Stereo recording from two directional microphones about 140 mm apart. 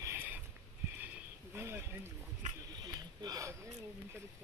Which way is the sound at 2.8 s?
25° right (ahead or behind).